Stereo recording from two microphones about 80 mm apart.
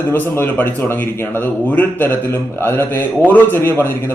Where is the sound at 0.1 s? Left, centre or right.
Left.